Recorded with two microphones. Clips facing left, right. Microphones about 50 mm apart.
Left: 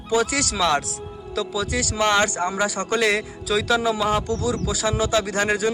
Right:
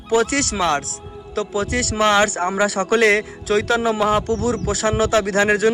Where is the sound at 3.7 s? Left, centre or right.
Right.